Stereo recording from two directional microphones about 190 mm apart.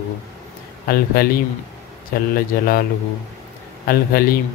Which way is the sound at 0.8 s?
50° left (ahead or behind).